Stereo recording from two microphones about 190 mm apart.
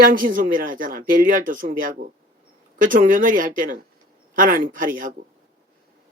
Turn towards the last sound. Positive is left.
turn(degrees=-45)  # may be behind; listen again after turning